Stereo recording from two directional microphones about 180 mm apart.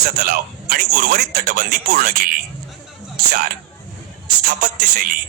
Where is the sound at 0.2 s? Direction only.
55° right (ahead or behind).